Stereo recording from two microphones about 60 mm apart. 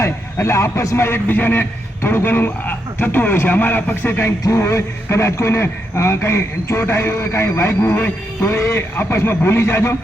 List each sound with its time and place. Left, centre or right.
0.0 s a man's voice: left
1.3 s speech: left
4.4 s a man's voice: left
8.4 s speech: left
9.0 s a man's voice: left